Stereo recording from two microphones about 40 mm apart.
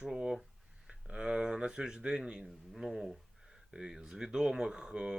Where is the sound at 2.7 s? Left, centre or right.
Centre.